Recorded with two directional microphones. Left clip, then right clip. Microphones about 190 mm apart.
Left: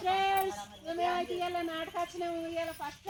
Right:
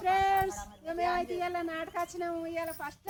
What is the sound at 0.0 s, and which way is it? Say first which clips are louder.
Child singing: right 2 dB; 5° right (ahead or behind).